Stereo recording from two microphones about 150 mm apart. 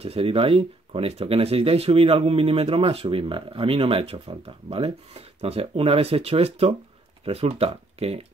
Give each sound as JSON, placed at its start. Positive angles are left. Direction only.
{"t": 0.0, "sound": "speech", "side_deg": -40}